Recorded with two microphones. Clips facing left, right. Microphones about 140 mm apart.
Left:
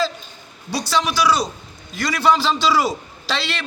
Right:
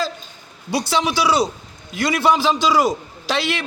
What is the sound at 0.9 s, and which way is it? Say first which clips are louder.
Speech: even; 25° right (ahead or behind).